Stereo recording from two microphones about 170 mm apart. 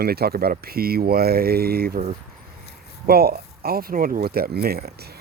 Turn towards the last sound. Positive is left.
turn(degrees=-70)  # may be behind; listen again after turning